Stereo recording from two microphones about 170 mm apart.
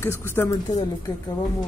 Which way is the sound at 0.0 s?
15° left (ahead or behind).